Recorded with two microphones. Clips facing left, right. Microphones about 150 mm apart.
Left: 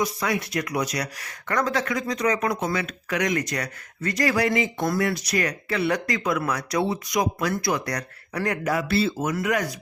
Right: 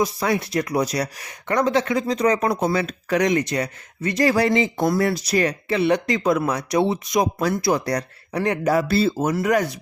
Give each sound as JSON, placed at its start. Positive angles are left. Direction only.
{"t": 0.0, "sound": "speech", "side_deg": -30}
{"t": 1.2, "sound": "speech", "side_deg": -20}